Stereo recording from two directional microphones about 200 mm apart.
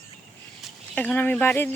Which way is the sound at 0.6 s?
5° left (ahead or behind).